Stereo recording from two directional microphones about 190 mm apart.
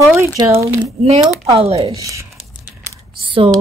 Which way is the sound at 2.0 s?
15° right (ahead or behind).